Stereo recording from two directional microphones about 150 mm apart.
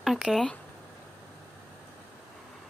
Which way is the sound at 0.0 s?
Centre (ahead or behind).